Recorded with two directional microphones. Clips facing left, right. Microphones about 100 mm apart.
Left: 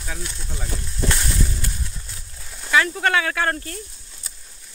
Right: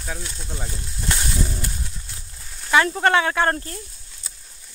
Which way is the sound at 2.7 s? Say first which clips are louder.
Right 2 dB; 30° right (ahead or behind).